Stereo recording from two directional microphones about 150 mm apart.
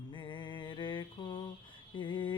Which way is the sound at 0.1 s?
35° left (ahead or behind).